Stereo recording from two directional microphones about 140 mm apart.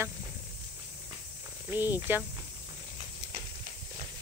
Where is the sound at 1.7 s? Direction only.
15° right (ahead or behind).